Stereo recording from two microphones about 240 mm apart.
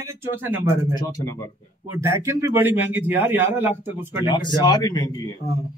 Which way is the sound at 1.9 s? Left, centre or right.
Centre.